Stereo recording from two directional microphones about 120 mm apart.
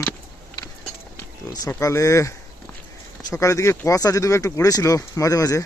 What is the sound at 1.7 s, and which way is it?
Speech, 25° left (ahead or behind).